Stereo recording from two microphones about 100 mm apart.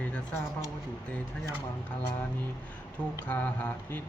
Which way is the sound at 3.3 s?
15° left (ahead or behind).